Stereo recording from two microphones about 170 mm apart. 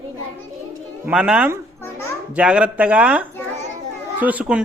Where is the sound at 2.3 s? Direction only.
5° right (ahead or behind).